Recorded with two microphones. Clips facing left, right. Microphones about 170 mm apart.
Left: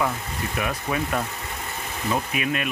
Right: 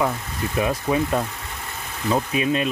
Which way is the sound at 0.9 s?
25° right (ahead or behind).